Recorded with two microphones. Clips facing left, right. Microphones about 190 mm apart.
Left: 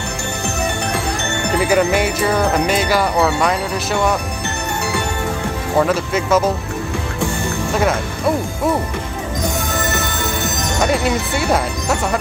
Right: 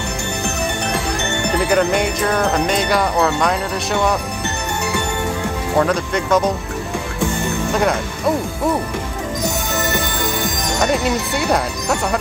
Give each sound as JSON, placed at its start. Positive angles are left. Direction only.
{"t": 1.6, "sound": "speech", "side_deg": 5}
{"t": 5.8, "sound": "speech", "side_deg": 5}
{"t": 7.2, "sound": "music", "side_deg": -20}
{"t": 10.8, "sound": "speech", "side_deg": 0}